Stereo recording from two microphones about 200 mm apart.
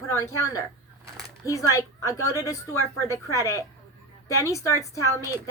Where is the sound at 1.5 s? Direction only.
15° left (ahead or behind).